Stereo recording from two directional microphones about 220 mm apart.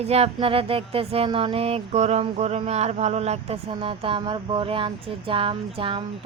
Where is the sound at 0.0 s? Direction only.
30° right (ahead or behind).